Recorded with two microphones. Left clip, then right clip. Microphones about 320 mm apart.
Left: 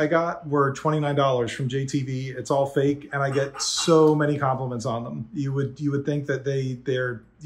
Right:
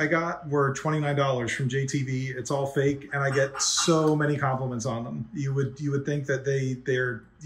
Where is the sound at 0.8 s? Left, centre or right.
Left.